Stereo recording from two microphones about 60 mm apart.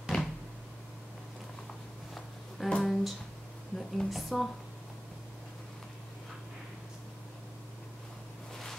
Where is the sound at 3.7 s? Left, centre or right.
Centre.